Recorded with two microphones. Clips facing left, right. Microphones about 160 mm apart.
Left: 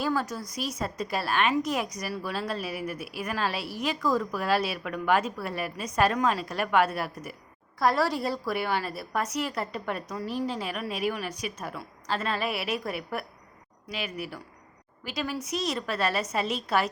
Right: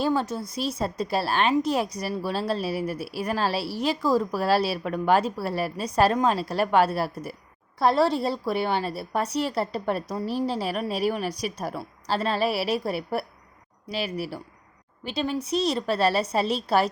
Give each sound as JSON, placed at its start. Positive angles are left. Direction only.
{"t": 0.0, "sound": "a woman's voice", "side_deg": -25}